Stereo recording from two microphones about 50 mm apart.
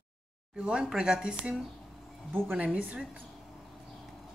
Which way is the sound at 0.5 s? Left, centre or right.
Right.